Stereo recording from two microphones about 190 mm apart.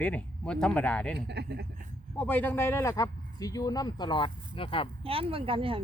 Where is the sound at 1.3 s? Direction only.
60° right (ahead or behind).